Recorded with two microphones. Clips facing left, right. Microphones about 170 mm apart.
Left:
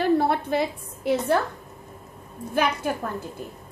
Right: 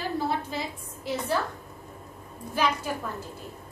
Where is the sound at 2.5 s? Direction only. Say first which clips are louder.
Left 3 dB; 55° left (ahead or behind).